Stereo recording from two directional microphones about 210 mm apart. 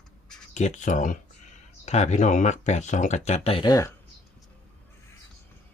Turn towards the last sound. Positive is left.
turn(degrees=15)  # may be behind; listen again after turning